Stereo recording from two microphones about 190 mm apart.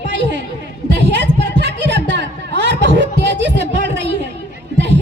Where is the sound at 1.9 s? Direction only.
65° right (ahead or behind).